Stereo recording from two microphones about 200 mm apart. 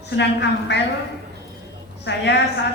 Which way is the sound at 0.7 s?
60° left (ahead or behind).